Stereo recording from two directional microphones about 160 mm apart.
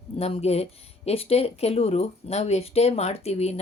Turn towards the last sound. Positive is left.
turn(degrees=40)  # may be behind; listen again after turning